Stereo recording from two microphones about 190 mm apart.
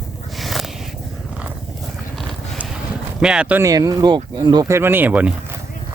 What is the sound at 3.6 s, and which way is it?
Speech, 20° right (ahead or behind).